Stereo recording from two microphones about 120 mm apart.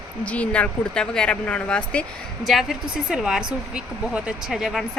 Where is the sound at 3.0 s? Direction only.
5° right (ahead or behind).